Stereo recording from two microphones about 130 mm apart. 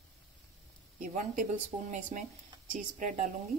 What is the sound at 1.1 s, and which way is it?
A woman's voice, 70° right (ahead or behind).